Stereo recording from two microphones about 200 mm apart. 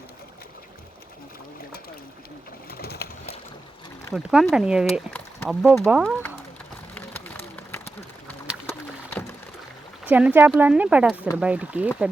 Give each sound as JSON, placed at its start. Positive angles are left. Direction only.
{"t": 2.6, "sound": "pigeon", "side_deg": 50}
{"t": 4.1, "sound": "speech", "side_deg": 0}
{"t": 6.9, "sound": "vehicle", "side_deg": 10}
{"t": 10.1, "sound": "speech", "side_deg": -10}